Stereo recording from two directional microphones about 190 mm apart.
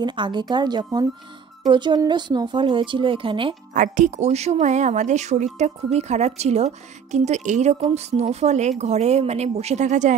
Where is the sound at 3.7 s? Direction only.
40° right (ahead or behind).